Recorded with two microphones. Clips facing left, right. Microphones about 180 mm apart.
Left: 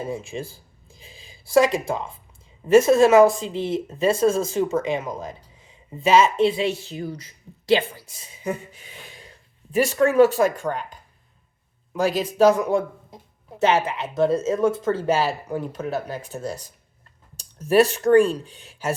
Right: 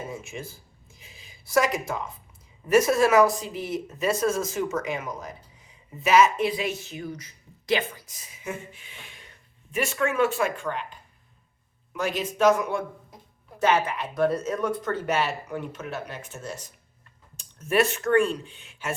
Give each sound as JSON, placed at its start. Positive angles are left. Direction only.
{"t": 0.0, "sound": "speech", "side_deg": 30}
{"t": 11.9, "sound": "speech", "side_deg": 35}